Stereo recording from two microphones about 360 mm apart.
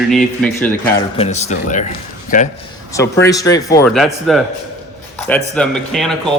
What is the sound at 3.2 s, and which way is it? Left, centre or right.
A man's voice, centre.